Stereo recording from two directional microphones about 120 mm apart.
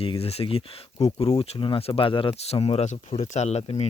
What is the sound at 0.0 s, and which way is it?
Speech, 50° left (ahead or behind).